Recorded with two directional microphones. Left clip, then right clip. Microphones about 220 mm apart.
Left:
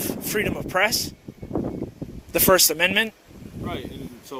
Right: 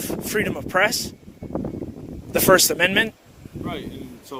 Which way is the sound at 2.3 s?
25° right (ahead or behind).